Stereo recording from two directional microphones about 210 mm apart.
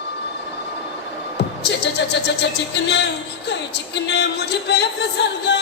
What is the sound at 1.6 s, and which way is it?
Speech, 55° left (ahead or behind).